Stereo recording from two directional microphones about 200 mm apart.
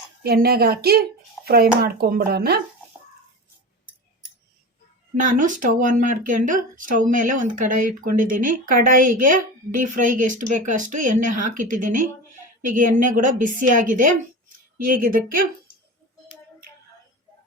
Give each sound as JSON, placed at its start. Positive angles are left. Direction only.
{"t": 0.2, "sound": "speech", "side_deg": -50}
{"t": 5.2, "sound": "speech", "side_deg": -40}